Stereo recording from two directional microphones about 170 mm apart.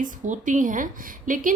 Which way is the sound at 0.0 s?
45° right (ahead or behind).